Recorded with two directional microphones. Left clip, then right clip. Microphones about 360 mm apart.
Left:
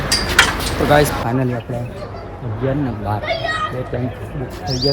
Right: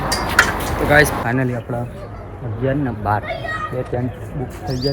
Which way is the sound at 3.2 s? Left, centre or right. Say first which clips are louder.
Left 4 dB; left.